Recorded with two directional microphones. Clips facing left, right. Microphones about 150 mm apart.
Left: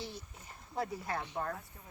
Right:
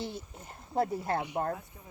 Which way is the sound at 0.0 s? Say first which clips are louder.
Right 6 dB; 25° right (ahead or behind).